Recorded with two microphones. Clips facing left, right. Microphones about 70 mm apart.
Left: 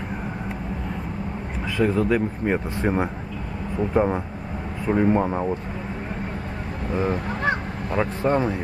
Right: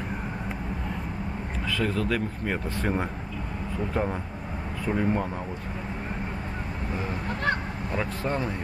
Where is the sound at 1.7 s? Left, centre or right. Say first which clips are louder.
Left 7 dB; centre.